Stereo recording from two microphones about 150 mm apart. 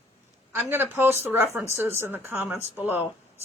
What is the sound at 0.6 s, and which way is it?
A woman's voice, 15° right (ahead or behind).